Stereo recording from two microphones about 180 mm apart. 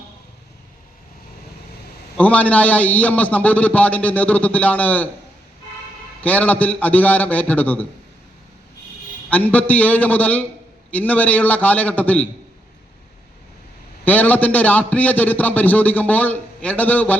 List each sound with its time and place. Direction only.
2.1 s a man's voice: 10° left (ahead or behind)
6.2 s a man's voice: 10° left (ahead or behind)
9.3 s a man's voice: 10° left (ahead or behind)
14.0 s a man's voice: 10° left (ahead or behind)